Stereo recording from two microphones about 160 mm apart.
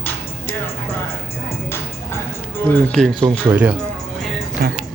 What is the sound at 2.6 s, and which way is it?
Speech, 5° left (ahead or behind).